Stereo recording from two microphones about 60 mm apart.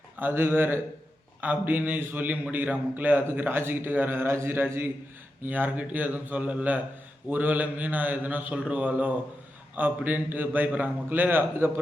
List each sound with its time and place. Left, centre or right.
0.2 s a man's voice: right